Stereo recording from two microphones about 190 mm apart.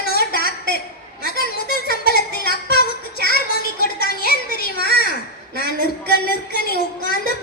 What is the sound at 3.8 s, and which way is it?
Music, 55° left (ahead or behind).